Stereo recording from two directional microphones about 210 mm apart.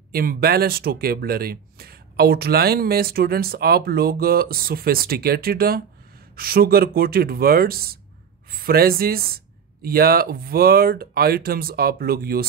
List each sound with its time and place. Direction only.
0.1 s speech: 45° right (ahead or behind)